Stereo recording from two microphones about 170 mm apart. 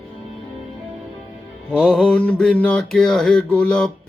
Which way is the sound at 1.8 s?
Centre (ahead or behind).